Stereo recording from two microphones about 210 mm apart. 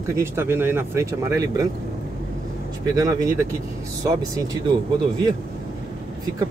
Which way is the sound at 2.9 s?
15° right (ahead or behind).